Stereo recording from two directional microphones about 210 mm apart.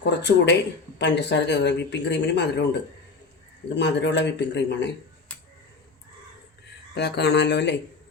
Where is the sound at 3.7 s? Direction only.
55° left (ahead or behind).